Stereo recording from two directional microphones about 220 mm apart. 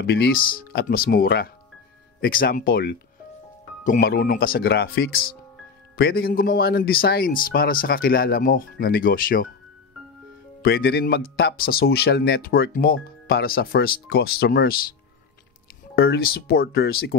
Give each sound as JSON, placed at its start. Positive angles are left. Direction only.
{"t": 0.0, "sound": "speech", "side_deg": 45}
{"t": 10.6, "sound": "speech", "side_deg": 45}
{"t": 16.0, "sound": "speech", "side_deg": 45}